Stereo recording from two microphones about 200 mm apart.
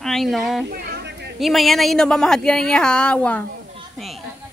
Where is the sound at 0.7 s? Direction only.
50° right (ahead or behind).